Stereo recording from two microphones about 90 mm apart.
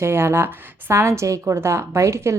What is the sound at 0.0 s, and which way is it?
A woman's voice, 30° right (ahead or behind).